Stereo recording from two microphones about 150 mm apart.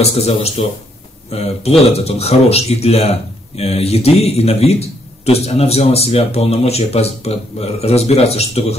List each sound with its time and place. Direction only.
0.0 s speech: 45° left (ahead or behind)